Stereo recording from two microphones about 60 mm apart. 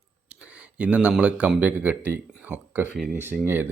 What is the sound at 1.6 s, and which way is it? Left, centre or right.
Speech, right.